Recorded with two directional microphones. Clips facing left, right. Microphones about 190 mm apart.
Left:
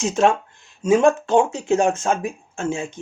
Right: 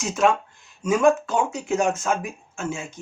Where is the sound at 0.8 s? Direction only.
25° left (ahead or behind).